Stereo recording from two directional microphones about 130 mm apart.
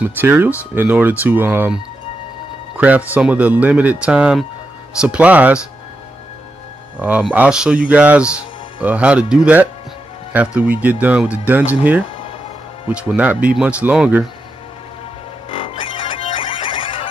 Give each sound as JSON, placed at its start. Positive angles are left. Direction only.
{"t": 0.0, "sound": "speech", "side_deg": -15}
{"t": 2.8, "sound": "speech", "side_deg": -10}
{"t": 7.0, "sound": "speech", "side_deg": -10}
{"t": 15.5, "sound": "music", "side_deg": 45}